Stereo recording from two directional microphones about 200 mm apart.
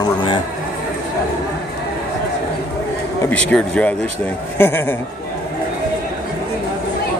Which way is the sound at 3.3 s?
5° left (ahead or behind).